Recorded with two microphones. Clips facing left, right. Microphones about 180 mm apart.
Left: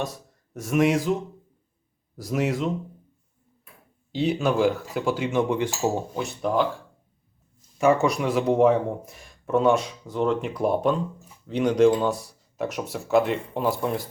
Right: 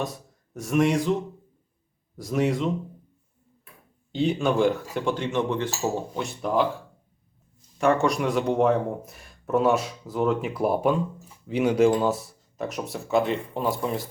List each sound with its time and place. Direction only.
0.0 s speech: centre (ahead or behind)
2.1 s speech: centre (ahead or behind)
4.1 s speech: centre (ahead or behind)
6.1 s speech: centre (ahead or behind)
7.8 s speech: centre (ahead or behind)